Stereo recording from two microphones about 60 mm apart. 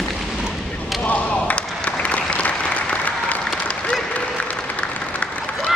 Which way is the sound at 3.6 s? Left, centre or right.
Centre.